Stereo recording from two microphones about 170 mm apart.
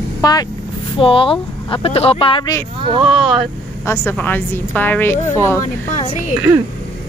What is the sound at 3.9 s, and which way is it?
A woman's voice, 10° left (ahead or behind).